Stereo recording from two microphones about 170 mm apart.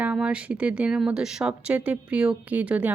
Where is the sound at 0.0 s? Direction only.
5° right (ahead or behind).